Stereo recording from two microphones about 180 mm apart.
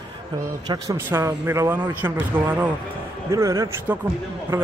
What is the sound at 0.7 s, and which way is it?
Speech, 15° right (ahead or behind).